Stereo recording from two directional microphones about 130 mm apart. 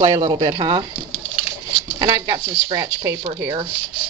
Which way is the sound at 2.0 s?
25° right (ahead or behind).